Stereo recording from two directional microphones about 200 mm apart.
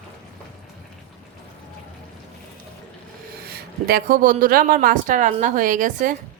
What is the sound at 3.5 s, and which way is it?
A woman's voice, 50° right (ahead or behind).